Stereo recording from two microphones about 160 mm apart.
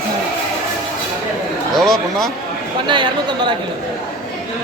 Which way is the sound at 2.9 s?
30° right (ahead or behind).